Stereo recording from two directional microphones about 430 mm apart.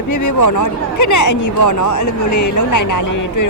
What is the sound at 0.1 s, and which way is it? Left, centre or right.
Speech, left.